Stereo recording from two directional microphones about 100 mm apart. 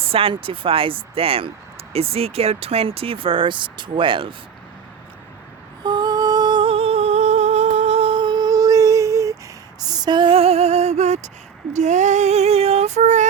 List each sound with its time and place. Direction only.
0.1 s speech: 65° right (ahead or behind)
5.8 s a sound: 45° right (ahead or behind)
6.7 s humming: 75° right (ahead or behind)
8.2 s a sound: 45° right (ahead or behind)
9.8 s music: 40° right (ahead or behind); by 11.2 s 90° right
12.2 s female singing: 90° right